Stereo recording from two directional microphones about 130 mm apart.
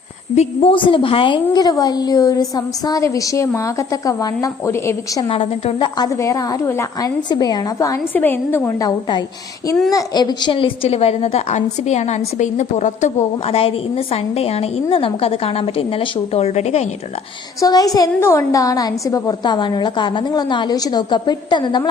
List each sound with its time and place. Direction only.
0.3 s a woman's voice: 45° left (ahead or behind); by 5.2 s 20° left (ahead or behind)
5.3 s a woman's voice: 45° left (ahead or behind)
6.0 s a woman's voice: 25° left (ahead or behind)
7.3 s a woman's voice: 30° left (ahead or behind)
8.1 s a woman's voice: 15° left (ahead or behind)
8.9 s a woman's voice: 35° left (ahead or behind); by 13.1 s 65° left (ahead or behind)
13.5 s a woman's voice: 50° left (ahead or behind)
17.6 s a woman's voice: 30° left (ahead or behind)